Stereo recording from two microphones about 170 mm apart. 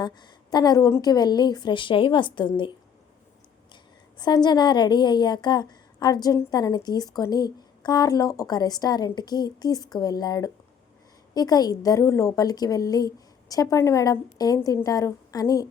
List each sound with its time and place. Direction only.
0.0 s a woman's voice: 25° left (ahead or behind)
4.2 s a woman's voice: 25° left (ahead or behind)